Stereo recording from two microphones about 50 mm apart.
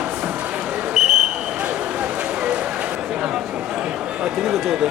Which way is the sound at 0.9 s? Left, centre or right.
Centre.